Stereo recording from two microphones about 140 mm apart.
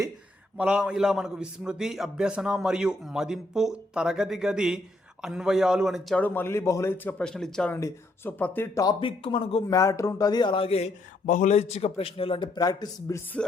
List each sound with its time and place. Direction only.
0.5 s a man's voice: 10° right (ahead or behind)
6.1 s a man's voice: 10° left (ahead or behind)
7.7 s a man's voice: 20° left (ahead or behind)
9.0 s speech: 40° left (ahead or behind)
9.7 s a man's voice: 25° left (ahead or behind); by 12.5 s 40° left (ahead or behind)
12.5 s speech: 25° left (ahead or behind)